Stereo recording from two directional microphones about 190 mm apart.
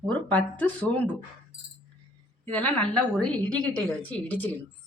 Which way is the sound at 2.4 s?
5° left (ahead or behind).